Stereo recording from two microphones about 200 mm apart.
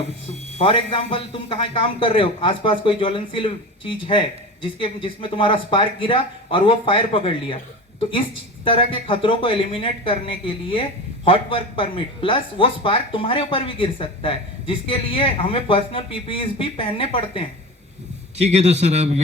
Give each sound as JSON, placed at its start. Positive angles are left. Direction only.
{"t": 0.6, "sound": "speech", "side_deg": 25}
{"t": 8.6, "sound": "speech", "side_deg": 25}
{"t": 18.5, "sound": "a man's voice", "side_deg": -35}